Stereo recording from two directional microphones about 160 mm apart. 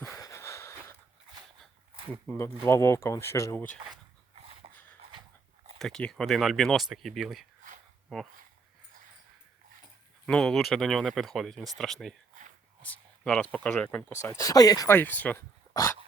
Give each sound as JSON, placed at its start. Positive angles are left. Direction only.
{"t": 0.0, "sound": "a sound", "side_deg": 20}
{"t": 2.2, "sound": "speech", "side_deg": 15}
{"t": 4.6, "sound": "a sound", "side_deg": -35}
{"t": 5.8, "sound": "speech", "side_deg": 5}
{"t": 10.2, "sound": "speech", "side_deg": 5}
{"t": 14.9, "sound": "speech", "side_deg": 10}
{"t": 15.7, "sound": "dog", "side_deg": 20}